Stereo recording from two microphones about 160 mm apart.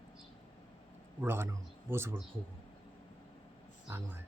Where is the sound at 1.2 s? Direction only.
15° right (ahead or behind).